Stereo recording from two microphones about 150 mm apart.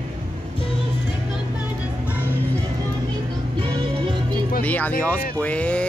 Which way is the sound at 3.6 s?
35° right (ahead or behind).